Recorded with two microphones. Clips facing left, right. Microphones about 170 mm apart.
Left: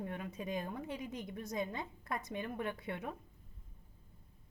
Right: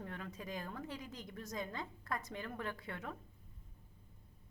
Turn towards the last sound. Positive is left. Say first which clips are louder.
# left 4 dB
turn(degrees=20)  # may be behind; listen again after turning